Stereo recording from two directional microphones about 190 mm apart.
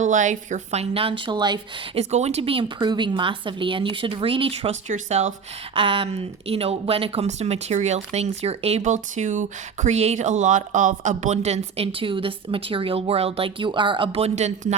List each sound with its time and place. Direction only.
0.0 s speech: 40° right (ahead or behind); by 1.5 s 25° right (ahead or behind)
2.0 s a woman's voice: 35° right (ahead or behind)